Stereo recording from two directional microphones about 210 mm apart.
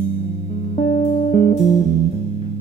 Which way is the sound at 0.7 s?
40° left (ahead or behind).